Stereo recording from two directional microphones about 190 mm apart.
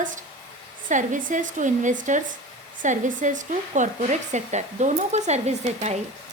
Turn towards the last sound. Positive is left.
turn(degrees=-35)  # may be behind; listen again after turning